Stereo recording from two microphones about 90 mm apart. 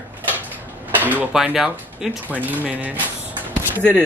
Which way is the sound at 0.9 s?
20° right (ahead or behind).